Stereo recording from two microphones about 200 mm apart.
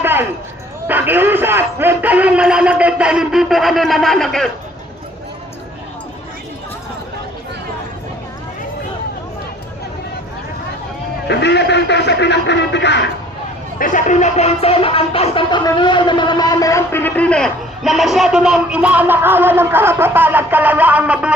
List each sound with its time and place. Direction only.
0.0 s a sound: 10° right (ahead or behind)
0.9 s music: 10° right (ahead or behind)
11.3 s a man's voice: 60° left (ahead or behind)
13.7 s music: 40° left (ahead or behind); by 21.3 s 5° right (ahead or behind)